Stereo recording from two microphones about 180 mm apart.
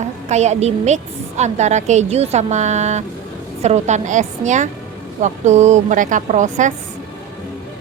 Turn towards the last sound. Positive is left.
turn(degrees=-40)  # may be behind; listen again after turning